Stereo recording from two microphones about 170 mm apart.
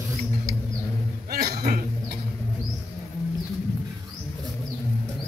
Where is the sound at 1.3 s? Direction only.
60° right (ahead or behind).